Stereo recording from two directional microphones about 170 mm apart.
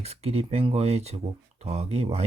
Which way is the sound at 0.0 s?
40° right (ahead or behind).